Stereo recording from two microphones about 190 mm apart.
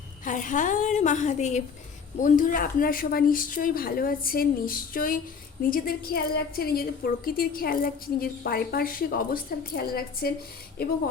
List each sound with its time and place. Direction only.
0.3 s a woman's voice: 45° left (ahead or behind)